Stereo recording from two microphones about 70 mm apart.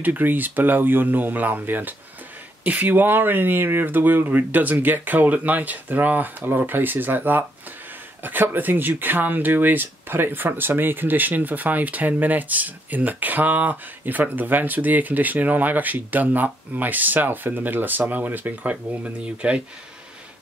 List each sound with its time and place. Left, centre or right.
0.0 s speech: right